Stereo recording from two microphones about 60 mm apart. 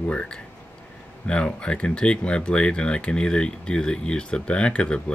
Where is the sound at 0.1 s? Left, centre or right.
Centre.